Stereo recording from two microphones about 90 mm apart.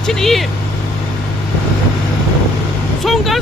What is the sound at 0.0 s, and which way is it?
Speech, 5° left (ahead or behind).